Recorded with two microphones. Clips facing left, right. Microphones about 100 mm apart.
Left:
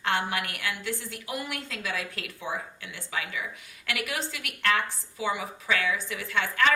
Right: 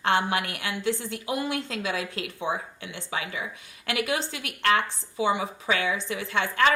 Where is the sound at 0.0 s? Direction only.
25° right (ahead or behind).